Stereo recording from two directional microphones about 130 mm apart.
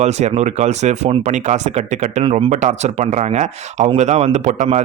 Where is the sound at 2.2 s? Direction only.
50° right (ahead or behind).